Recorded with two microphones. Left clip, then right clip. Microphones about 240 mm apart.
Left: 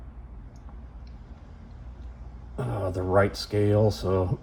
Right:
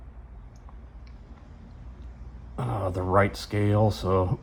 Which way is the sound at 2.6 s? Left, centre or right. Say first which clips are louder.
Even; centre.